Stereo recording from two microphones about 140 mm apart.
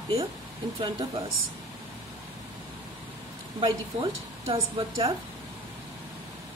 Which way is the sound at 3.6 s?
35° right (ahead or behind).